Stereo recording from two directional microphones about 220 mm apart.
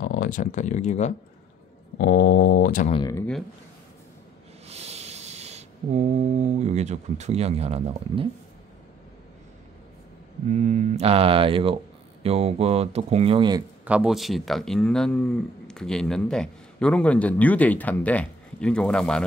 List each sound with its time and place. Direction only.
0.0 s speech: 40° left (ahead or behind)
2.0 s mantra: 45° left (ahead or behind)
2.9 s speech: 20° left (ahead or behind)
4.6 s a sound: 30° right (ahead or behind)
10.5 s speech: 35° right (ahead or behind)
13.8 s speech: 5° right (ahead or behind)